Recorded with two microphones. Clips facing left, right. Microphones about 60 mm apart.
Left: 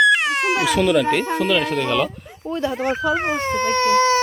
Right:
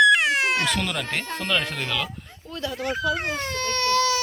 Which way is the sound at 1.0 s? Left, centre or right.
Centre.